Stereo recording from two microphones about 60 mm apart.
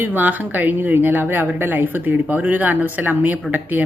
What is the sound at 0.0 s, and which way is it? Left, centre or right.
Speech, right.